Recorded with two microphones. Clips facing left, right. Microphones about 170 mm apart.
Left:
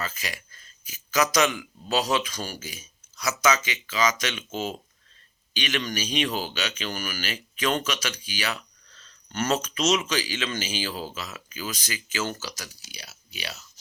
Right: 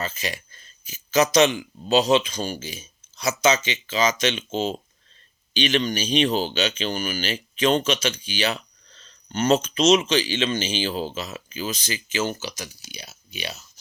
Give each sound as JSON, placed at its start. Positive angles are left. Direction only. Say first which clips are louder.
{"t": 0.0, "sound": "speech", "louder": "right 4 dB", "side_deg": -25}